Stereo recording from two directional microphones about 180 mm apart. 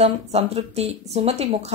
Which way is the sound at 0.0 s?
35° right (ahead or behind).